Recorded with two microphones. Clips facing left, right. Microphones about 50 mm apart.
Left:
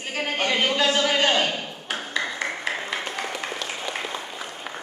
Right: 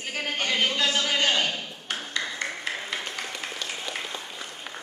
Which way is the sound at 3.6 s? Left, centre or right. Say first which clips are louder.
Left 3 dB; centre.